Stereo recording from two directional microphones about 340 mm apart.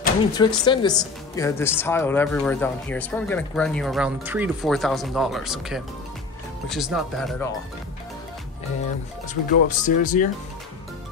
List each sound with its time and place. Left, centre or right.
0.4 s speech: centre
9.3 s speech: left